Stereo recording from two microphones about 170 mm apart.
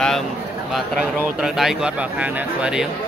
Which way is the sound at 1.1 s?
5° right (ahead or behind).